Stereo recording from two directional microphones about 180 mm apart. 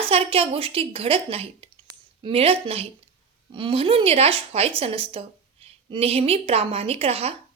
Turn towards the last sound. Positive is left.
turn(degrees=-35)  # may be behind; listen again after turning